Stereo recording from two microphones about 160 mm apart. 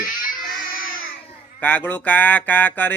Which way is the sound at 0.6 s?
65° left (ahead or behind).